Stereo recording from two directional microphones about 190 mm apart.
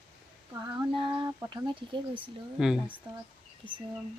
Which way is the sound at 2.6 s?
Centre (ahead or behind).